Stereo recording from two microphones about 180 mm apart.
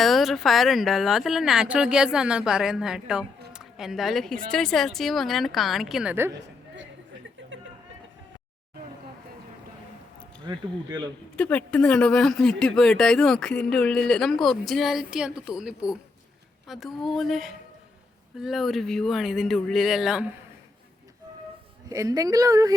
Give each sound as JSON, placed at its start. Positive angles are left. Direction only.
{"t": 0.0, "sound": "speech", "side_deg": 0}
{"t": 10.4, "sound": "speech", "side_deg": -25}
{"t": 11.3, "sound": "speech", "side_deg": 5}
{"t": 21.8, "sound": "speech", "side_deg": -20}